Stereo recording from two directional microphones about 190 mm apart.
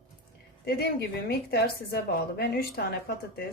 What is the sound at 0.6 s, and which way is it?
A woman's voice, 55° left (ahead or behind).